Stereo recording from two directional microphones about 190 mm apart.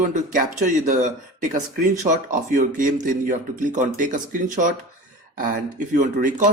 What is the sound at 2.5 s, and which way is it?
Speech, 45° right (ahead or behind).